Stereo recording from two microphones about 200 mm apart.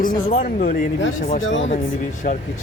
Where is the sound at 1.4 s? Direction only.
70° left (ahead or behind).